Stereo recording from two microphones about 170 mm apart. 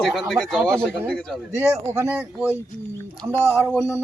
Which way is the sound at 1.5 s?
15° right (ahead or behind).